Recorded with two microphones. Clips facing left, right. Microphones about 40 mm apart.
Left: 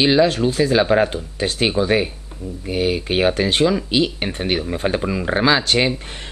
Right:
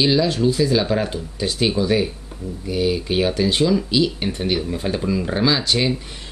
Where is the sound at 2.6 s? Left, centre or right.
Left.